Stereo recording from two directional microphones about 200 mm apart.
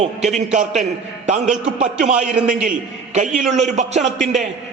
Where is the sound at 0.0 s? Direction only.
35° right (ahead or behind).